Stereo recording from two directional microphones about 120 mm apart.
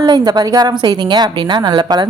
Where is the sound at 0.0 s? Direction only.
35° right (ahead or behind).